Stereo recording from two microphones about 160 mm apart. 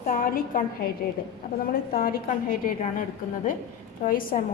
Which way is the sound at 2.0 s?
60° left (ahead or behind).